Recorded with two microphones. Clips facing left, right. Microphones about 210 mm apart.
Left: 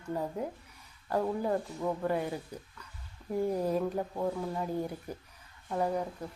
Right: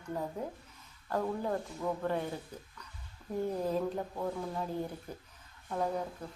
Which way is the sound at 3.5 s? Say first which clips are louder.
Left 2 dB; 10° left (ahead or behind).